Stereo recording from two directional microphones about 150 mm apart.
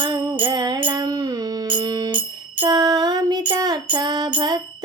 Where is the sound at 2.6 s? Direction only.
25° right (ahead or behind).